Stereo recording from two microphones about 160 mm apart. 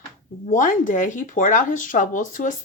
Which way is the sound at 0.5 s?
55° left (ahead or behind).